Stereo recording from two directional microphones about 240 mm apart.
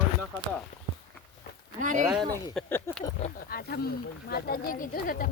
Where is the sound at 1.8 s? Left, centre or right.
Right.